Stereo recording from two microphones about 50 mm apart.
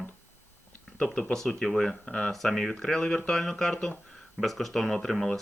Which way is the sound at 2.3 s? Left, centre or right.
Centre.